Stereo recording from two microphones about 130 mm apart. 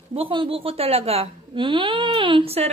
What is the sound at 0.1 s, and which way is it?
A woman's voice, 45° right (ahead or behind).